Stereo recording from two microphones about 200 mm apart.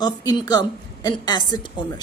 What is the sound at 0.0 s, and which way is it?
Speech, 20° left (ahead or behind).